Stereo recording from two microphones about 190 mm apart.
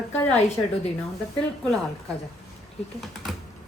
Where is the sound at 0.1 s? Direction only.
10° left (ahead or behind).